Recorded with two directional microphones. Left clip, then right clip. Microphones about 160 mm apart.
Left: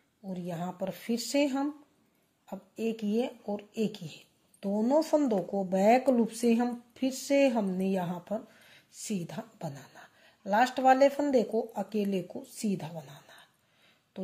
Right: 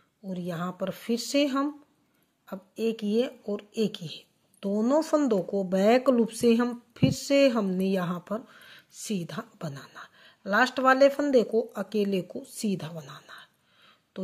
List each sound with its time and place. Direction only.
0.2 s speech: 40° right (ahead or behind)